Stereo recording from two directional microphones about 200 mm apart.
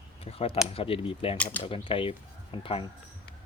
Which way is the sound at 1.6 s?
25° left (ahead or behind).